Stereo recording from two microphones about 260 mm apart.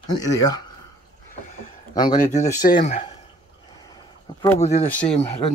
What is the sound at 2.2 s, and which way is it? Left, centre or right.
Speech, left.